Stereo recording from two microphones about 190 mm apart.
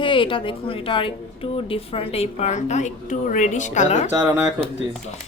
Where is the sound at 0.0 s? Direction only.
25° left (ahead or behind).